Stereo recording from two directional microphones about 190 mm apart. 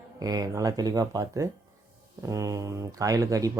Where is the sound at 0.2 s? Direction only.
20° right (ahead or behind).